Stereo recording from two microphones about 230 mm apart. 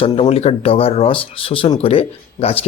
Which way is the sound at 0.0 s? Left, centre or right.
Left.